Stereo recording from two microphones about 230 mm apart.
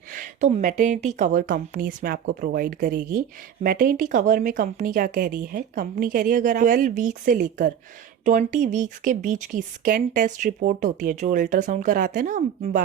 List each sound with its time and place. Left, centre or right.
0.1 s a woman's voice: right